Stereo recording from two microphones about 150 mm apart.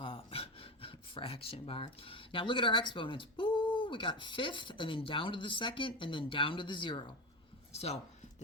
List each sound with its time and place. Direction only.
0.0 s speech: 40° left (ahead or behind)
7.7 s speech: 45° left (ahead or behind)